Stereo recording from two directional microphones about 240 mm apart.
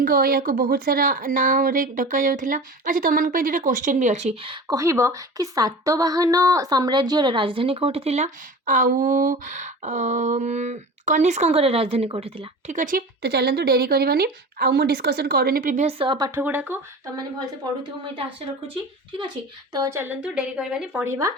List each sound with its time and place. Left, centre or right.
0.0 s a woman's voice: right; by 16.7 s centre
19.2 s a woman's voice: centre